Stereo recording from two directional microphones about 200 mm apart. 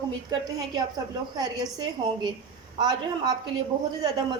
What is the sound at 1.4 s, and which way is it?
A woman's voice, 20° right (ahead or behind).